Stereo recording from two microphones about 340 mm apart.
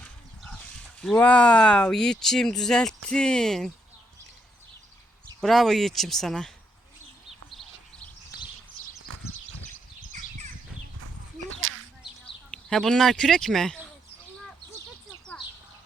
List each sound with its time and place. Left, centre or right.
1.0 s speech: centre
5.4 s speech: centre
7.5 s a sound: centre
10.1 s bird: right
11.0 s a sound: right
12.5 s speech: centre